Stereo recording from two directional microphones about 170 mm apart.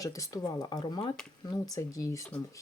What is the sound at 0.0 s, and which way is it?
Speech, 20° left (ahead or behind).